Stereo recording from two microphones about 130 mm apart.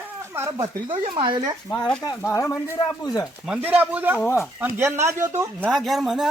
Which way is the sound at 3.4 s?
10° right (ahead or behind).